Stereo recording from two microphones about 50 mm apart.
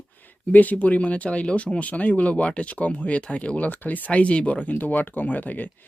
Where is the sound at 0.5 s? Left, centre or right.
Left.